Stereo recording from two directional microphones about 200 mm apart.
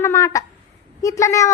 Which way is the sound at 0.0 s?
15° left (ahead or behind).